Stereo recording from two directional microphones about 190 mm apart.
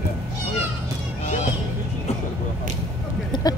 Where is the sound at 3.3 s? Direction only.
20° left (ahead or behind).